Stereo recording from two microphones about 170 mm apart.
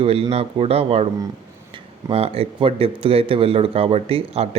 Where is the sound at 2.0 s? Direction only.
35° right (ahead or behind).